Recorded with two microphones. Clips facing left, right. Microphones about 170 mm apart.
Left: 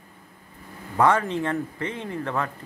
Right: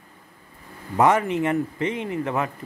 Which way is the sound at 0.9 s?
15° right (ahead or behind).